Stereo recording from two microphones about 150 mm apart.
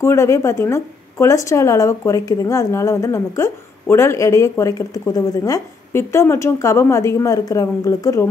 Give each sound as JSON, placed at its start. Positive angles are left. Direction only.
{"t": 0.0, "sound": "a woman's voice", "side_deg": 20}